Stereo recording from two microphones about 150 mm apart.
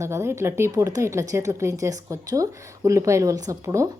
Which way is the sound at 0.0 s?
20° right (ahead or behind).